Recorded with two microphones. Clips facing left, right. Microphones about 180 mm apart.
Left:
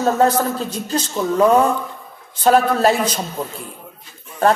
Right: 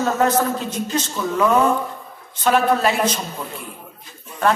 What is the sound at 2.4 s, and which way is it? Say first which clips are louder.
Speech: left 3 dB; 40° left (ahead or behind).